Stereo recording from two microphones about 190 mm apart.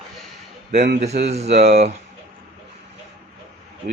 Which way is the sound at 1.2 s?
35° right (ahead or behind).